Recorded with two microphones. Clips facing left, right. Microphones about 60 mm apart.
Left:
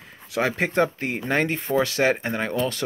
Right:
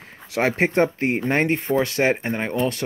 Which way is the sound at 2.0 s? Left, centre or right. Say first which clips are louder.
Right 1 dB; right.